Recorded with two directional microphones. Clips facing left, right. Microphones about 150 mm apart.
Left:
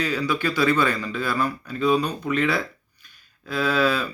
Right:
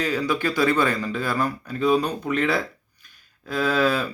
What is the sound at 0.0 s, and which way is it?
Speech, 45° right (ahead or behind).